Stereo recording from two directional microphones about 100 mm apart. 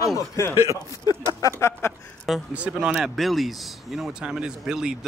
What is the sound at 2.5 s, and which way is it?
Speech, 10° right (ahead or behind).